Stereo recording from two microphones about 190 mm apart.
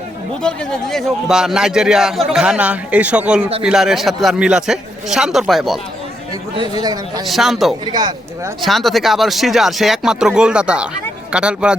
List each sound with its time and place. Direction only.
0.4 s a man's voice: 5° left (ahead or behind)
7.3 s a man's voice: centre (ahead or behind)
7.9 s speech: 20° right (ahead or behind)
8.6 s a man's voice: centre (ahead or behind)